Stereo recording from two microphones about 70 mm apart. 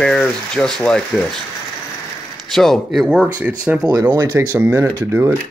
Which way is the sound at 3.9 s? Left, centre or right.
Right.